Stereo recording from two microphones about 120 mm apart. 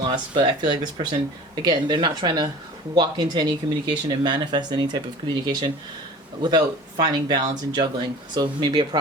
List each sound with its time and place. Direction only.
0.0 s speech: 40° right (ahead or behind)